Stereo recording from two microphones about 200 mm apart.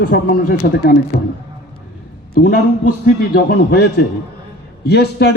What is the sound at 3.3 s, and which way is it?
A man's voice, 55° left (ahead or behind).